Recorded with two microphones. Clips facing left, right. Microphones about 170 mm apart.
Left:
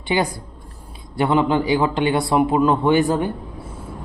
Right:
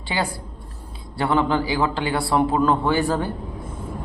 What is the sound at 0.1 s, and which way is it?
A man's voice, 20° left (ahead or behind).